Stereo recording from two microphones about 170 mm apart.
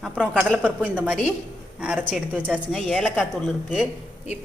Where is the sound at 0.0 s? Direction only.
5° right (ahead or behind).